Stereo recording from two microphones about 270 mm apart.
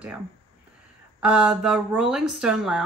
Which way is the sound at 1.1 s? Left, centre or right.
Centre.